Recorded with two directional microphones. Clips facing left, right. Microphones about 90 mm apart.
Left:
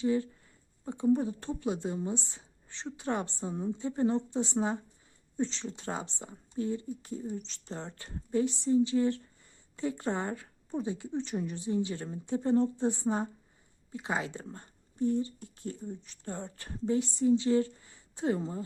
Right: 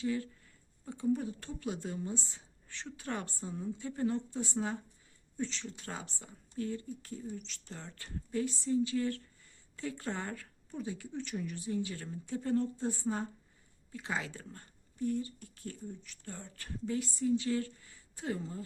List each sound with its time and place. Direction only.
0.0 s speech: 25° left (ahead or behind)